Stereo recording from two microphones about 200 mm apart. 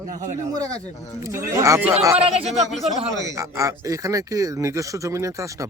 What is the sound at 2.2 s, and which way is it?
Speech, 30° right (ahead or behind).